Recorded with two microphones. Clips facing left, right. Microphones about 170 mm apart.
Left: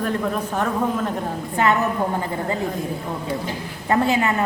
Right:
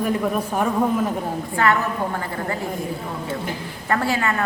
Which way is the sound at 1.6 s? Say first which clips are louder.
Left 1 dB; 20° left (ahead or behind).